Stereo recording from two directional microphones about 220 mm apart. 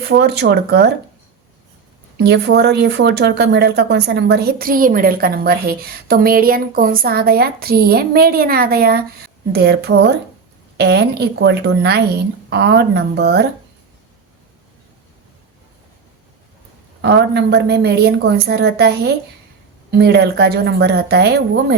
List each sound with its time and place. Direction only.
0.1 s speech: 50° right (ahead or behind)
2.1 s speech: 50° right (ahead or behind)
17.0 s speech: 50° right (ahead or behind)